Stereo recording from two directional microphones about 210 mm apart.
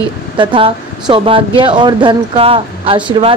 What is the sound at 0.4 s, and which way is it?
Speech, 25° right (ahead or behind).